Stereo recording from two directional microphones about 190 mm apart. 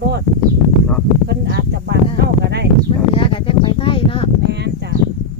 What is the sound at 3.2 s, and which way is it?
Speech, 30° left (ahead or behind).